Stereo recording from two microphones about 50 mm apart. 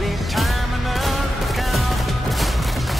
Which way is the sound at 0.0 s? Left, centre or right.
Centre.